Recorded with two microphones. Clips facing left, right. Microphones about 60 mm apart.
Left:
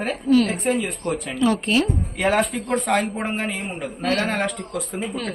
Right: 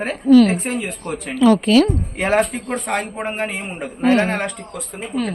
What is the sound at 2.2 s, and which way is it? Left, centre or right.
Speech, right.